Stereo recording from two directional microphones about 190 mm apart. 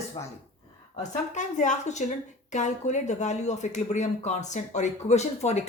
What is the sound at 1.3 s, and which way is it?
Speech, 40° left (ahead or behind).